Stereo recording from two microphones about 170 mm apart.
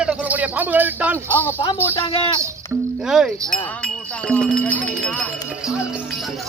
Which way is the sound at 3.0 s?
5° right (ahead or behind).